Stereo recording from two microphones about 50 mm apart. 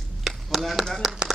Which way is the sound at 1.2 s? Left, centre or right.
Centre.